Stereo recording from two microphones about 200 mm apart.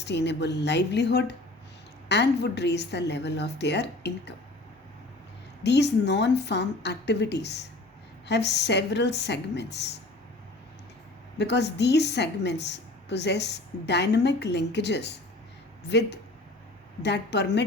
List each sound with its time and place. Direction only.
0.0 s a woman's voice: 60° left (ahead or behind)
5.6 s a woman's voice: 60° left (ahead or behind)
11.3 s a woman's voice: 60° left (ahead or behind)